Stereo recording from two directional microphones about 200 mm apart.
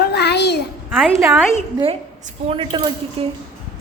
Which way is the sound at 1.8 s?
30° right (ahead or behind).